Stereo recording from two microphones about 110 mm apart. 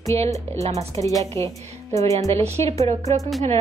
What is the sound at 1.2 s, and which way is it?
Speech, 25° left (ahead or behind).